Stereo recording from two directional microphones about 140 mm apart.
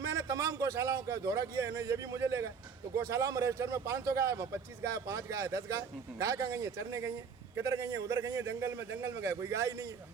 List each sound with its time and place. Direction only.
0.1 s a man's voice: 25° right (ahead or behind)